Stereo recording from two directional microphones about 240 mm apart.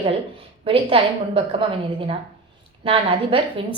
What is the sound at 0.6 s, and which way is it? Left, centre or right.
A woman's voice, right.